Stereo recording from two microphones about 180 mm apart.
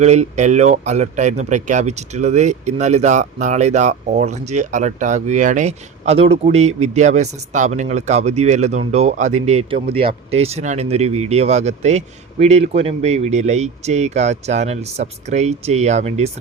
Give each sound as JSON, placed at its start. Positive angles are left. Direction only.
{"t": 0.0, "sound": "speech", "side_deg": -40}